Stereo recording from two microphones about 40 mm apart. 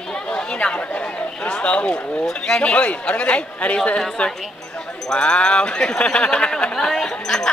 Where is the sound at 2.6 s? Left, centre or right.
Left.